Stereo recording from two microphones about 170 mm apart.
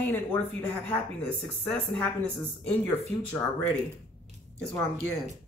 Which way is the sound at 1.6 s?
5° left (ahead or behind).